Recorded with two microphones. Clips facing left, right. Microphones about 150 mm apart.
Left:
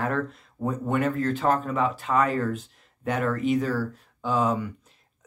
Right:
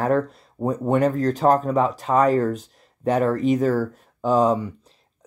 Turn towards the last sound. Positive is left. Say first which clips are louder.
# right 6 dB
turn(degrees=-35)  # may be behind; listen again after turning